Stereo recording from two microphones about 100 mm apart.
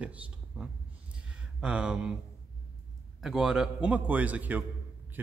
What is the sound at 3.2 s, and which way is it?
Speech, 5° right (ahead or behind).